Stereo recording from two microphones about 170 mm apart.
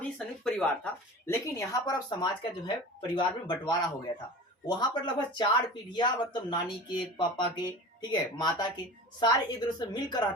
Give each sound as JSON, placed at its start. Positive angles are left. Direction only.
{"t": 0.2, "sound": "speech", "side_deg": 5}
{"t": 1.3, "sound": "speech", "side_deg": 20}